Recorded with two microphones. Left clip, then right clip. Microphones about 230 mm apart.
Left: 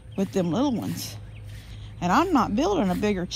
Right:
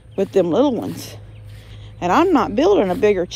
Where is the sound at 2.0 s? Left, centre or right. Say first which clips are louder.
Right 6 dB; right.